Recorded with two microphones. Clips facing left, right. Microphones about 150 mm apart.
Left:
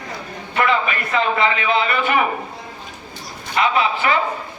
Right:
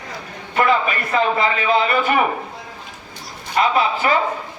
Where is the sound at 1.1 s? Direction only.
40° right (ahead or behind).